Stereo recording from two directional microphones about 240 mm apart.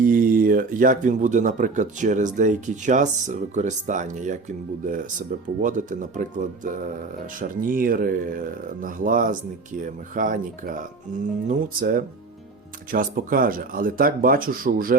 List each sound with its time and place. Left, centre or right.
0.0 s speech: right